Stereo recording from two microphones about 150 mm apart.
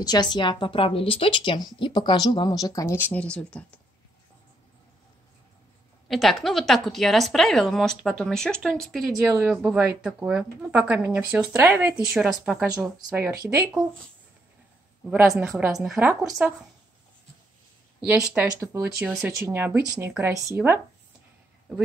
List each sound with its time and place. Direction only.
0.0 s speech: 25° left (ahead or behind)
3.1 s speech: 10° left (ahead or behind)
6.0 s speech: centre (ahead or behind)
9.3 s speech: 15° right (ahead or behind)
13.1 s speech: 15° right (ahead or behind)
15.3 s speech: 5° right (ahead or behind)
18.0 s speech: 10° right (ahead or behind)